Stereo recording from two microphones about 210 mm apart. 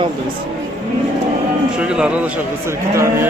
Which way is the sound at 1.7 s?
5° right (ahead or behind).